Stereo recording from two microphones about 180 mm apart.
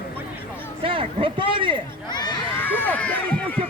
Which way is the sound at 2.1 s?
25° left (ahead or behind).